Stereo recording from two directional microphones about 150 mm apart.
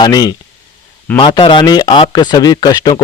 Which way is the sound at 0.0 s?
25° left (ahead or behind).